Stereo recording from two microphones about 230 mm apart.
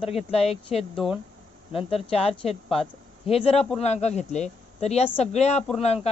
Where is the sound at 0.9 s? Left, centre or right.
Centre.